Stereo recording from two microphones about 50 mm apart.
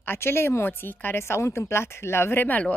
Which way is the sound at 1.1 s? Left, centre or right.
Left.